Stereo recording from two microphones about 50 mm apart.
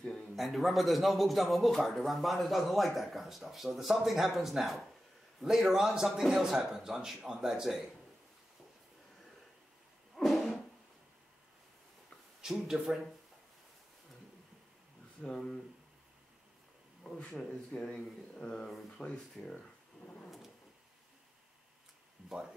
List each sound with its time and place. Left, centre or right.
0.4 s a man's voice: centre
10.1 s a sound: centre
12.4 s a man's voice: centre
15.2 s speech: centre
17.0 s speech: centre
19.0 s a man's voice: centre
19.4 s a man's voice: centre
20.2 s a sound: centre